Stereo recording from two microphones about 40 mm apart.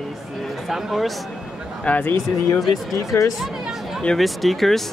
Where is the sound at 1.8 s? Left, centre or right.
Left.